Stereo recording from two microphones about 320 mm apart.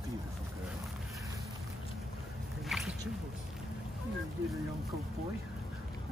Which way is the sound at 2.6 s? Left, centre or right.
Centre.